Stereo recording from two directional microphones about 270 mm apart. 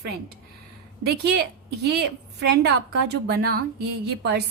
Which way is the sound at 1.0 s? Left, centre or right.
Right.